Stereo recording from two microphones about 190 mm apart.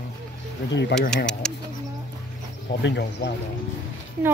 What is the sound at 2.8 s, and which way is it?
Speech, 60° left (ahead or behind).